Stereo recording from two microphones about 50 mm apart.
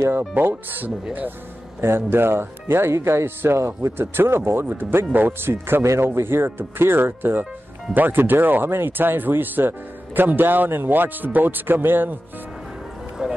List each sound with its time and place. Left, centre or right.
0.3 s speech: right
1.8 s speech: right
5.5 s speech: right
13.2 s speech: centre